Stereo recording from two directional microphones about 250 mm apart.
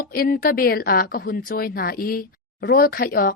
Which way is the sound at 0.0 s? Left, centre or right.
Left.